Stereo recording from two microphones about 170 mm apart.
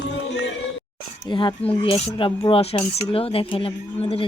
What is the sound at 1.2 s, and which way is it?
Speech, 30° left (ahead or behind).